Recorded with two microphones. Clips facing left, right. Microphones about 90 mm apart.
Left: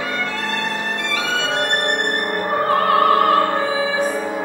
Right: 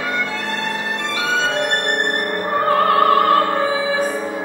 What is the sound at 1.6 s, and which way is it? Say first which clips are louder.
Music: even; 25° left (ahead or behind).